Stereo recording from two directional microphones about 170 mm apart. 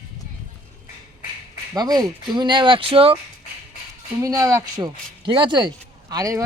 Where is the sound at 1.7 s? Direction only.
25° right (ahead or behind).